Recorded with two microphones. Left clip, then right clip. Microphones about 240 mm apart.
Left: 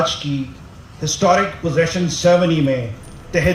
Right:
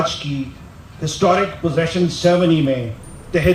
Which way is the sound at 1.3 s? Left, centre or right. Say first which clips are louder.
Left 1 dB; left.